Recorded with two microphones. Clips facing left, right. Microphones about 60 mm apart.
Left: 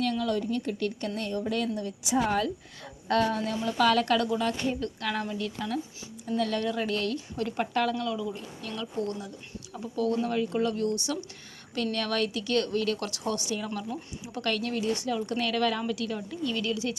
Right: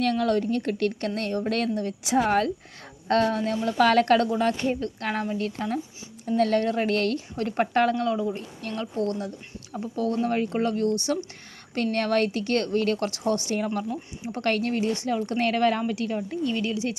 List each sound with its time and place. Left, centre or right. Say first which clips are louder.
0.0 s a woman's voice: right 5 dB; right
9.7 s speech: right 2 dB; right